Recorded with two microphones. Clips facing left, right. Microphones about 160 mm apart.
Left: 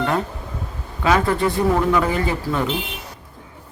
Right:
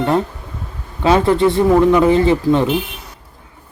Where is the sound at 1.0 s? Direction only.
25° right (ahead or behind).